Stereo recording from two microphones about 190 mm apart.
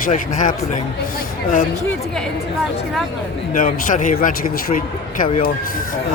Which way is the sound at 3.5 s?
45° left (ahead or behind).